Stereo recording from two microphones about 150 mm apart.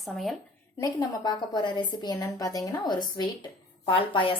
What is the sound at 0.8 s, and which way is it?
A woman's voice, 25° left (ahead or behind).